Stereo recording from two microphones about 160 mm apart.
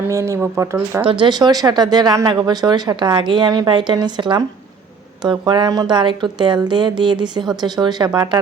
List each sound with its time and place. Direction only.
0.1 s speech: 20° right (ahead or behind)
1.0 s speech: 30° right (ahead or behind)
5.5 s speech: 25° right (ahead or behind)